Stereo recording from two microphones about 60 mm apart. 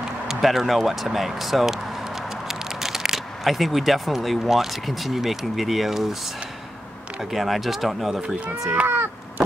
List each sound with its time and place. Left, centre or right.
0.3 s speech: centre
7.3 s speech: centre
8.8 s a sound: right